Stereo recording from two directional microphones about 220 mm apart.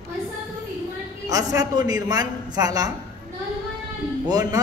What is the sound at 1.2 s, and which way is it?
A man's voice, 15° right (ahead or behind).